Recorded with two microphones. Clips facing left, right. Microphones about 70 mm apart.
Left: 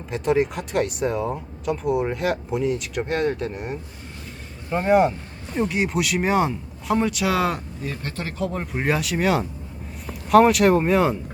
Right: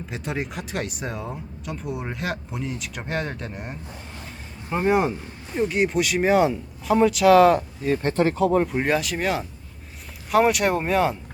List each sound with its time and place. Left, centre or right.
0.1 s speech: centre
7.9 s speech: right
8.4 s speech: centre